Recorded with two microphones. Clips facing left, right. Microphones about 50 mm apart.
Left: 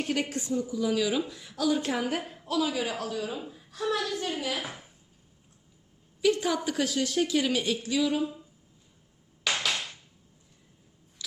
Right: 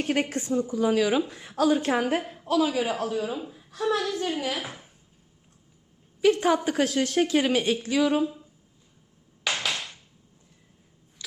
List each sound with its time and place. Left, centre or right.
0.0 s a woman's voice: right
2.2 s a woman's voice: centre
2.5 s a man's voice: right
3.2 s a woman's voice: centre
6.3 s a woman's voice: right
9.4 s a sound: centre